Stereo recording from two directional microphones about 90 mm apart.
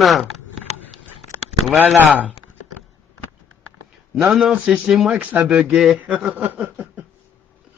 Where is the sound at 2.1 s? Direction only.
15° right (ahead or behind).